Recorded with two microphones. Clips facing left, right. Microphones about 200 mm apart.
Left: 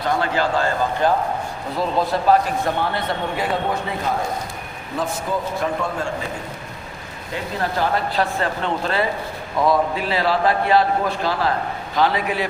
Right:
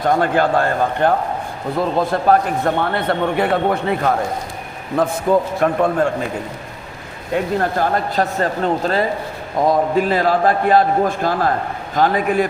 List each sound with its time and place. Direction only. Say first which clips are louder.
0.0 s a man's voice: right 5 dB; 50° right (ahead or behind)
7.3 s a man's voice: right 6 dB; 50° right (ahead or behind)